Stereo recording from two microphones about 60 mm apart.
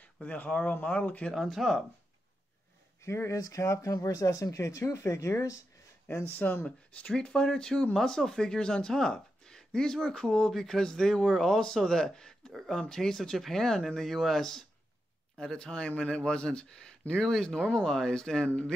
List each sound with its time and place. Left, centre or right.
0.2 s speech: left
1.3 s speech: centre
3.0 s speech: left
3.3 s speech: left
6.3 s speech: left
7.0 s speech: centre